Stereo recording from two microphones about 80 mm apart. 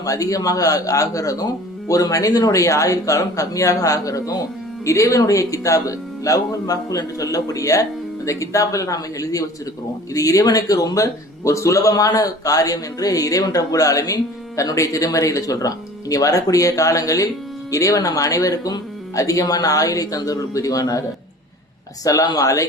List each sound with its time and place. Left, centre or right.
0.0 s a man's voice: left
22.0 s a man's voice: left